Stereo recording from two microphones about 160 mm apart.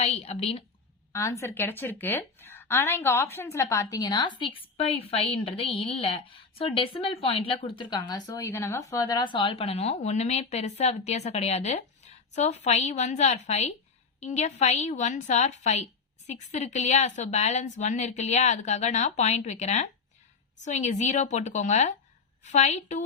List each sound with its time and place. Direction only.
0.0 s a woman's voice: 40° left (ahead or behind)
1.1 s a woman's voice: 20° left (ahead or behind); by 23.0 s 45° left (ahead or behind)